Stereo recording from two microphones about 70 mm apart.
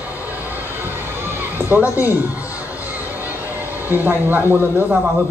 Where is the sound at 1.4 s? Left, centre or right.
Right.